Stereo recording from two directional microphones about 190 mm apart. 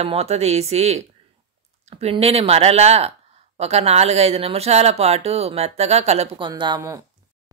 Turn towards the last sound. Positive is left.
turn(degrees=-20)  # may be behind; listen again after turning